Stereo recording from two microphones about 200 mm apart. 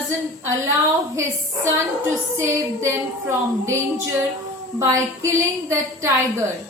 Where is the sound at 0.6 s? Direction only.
15° right (ahead or behind).